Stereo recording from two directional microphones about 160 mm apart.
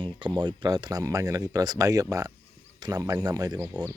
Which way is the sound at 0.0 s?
30° right (ahead or behind).